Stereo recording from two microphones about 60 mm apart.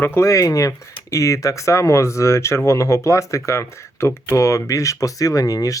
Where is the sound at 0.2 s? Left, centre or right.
Left.